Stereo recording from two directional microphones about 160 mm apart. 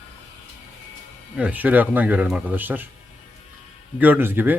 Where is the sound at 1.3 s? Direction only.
10° right (ahead or behind).